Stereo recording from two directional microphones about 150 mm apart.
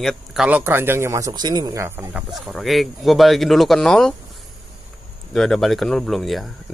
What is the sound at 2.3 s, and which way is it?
Speech, centre (ahead or behind).